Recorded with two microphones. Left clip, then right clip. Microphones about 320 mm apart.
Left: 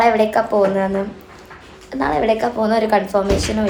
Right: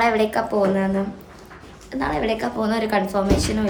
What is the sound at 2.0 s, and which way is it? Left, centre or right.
Speech, centre.